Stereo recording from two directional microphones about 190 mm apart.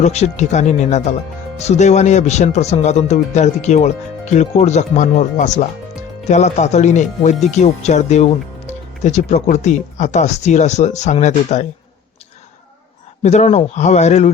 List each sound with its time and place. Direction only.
0.0 s speech: 35° left (ahead or behind)
13.2 s speech: 35° left (ahead or behind)